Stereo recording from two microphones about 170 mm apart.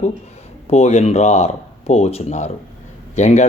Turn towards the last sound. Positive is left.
turn(degrees=45)  # may be behind; listen again after turning